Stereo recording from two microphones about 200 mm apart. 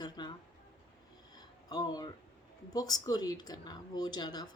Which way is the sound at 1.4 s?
20° left (ahead or behind).